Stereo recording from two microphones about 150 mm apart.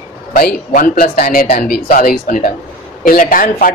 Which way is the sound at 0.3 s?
80° left.